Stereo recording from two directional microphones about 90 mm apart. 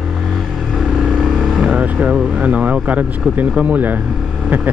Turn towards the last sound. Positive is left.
turn(degrees=-20)  # may be behind; listen again after turning